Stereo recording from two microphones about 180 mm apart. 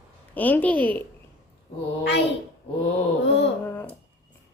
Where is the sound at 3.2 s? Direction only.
80° left.